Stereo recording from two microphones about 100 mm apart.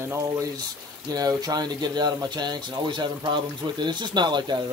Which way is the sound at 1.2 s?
40° right (ahead or behind).